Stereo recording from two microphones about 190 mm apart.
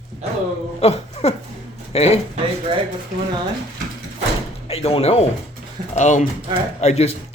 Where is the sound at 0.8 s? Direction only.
30° left (ahead or behind).